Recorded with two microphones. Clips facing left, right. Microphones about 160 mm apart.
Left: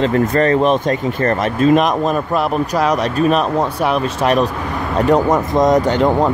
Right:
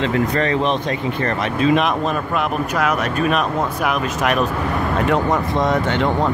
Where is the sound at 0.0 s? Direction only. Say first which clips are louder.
Left 4 dB; 45° left (ahead or behind).